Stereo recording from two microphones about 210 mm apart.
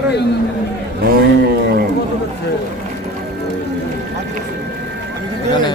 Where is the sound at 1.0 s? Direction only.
45° right (ahead or behind).